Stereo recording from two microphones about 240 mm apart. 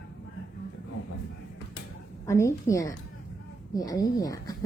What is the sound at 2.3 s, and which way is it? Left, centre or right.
A woman's voice, centre.